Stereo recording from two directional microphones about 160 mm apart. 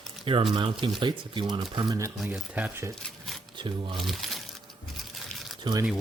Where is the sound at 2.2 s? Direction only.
5° right (ahead or behind).